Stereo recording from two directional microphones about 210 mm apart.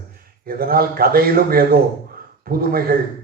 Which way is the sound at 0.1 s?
45° right (ahead or behind).